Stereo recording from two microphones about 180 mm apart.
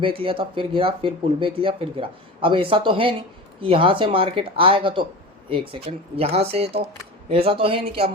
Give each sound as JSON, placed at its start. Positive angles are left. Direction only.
{"t": 0.0, "sound": "speech", "side_deg": -30}